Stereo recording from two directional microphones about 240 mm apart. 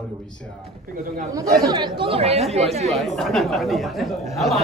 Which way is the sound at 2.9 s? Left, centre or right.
Centre.